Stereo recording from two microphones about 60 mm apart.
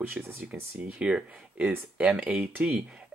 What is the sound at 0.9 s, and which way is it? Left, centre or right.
Speech, right.